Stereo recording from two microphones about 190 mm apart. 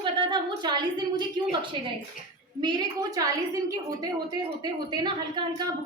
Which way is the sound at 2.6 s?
20° right (ahead or behind).